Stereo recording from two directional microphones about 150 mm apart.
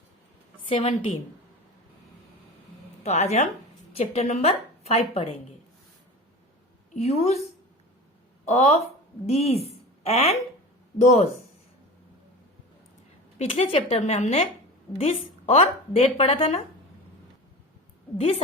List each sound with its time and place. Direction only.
0.7 s a woman's voice: 45° left (ahead or behind)
3.0 s a woman's voice: 45° left (ahead or behind)
6.9 s a woman's voice: 45° left (ahead or behind)
8.4 s a woman's voice: 45° left (ahead or behind)
13.4 s a woman's voice: 40° left (ahead or behind)
18.2 s a woman's voice: 45° left (ahead or behind)